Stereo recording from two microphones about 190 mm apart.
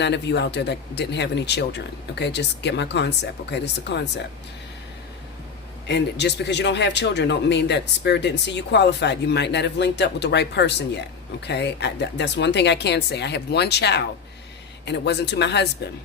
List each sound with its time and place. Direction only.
0.0 s a man's voice: 65° left (ahead or behind)
5.9 s a man's voice: 65° left (ahead or behind)